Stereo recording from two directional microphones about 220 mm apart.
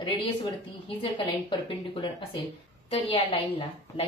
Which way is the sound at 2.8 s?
25° left (ahead or behind).